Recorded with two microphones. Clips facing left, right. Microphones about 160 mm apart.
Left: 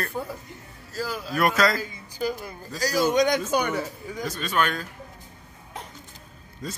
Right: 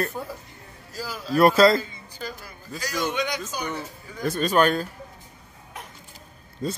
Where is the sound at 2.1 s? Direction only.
15° left (ahead or behind).